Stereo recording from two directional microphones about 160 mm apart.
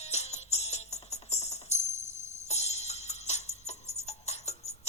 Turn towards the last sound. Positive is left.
turn(degrees=40)  # may be behind; listen again after turning